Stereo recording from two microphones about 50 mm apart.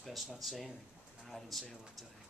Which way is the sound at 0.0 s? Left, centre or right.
Centre.